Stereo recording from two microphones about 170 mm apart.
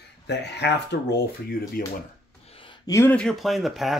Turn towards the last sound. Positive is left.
turn(degrees=0)  # may be behind; listen again after turning